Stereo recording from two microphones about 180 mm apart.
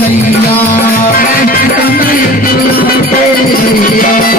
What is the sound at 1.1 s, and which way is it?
Music, 50° left (ahead or behind).